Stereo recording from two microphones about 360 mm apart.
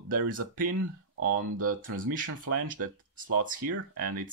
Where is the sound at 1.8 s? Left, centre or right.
Right.